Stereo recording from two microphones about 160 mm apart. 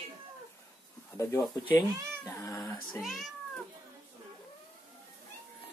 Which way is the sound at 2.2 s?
20° left (ahead or behind).